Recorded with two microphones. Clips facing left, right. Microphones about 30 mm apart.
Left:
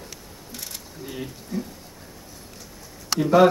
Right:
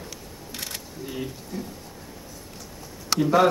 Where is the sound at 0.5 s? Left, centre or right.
Right.